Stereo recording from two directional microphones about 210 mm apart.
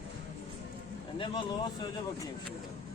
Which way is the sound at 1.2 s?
20° left (ahead or behind).